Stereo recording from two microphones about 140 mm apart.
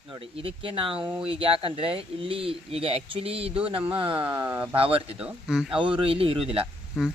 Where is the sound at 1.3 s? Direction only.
40° right (ahead or behind).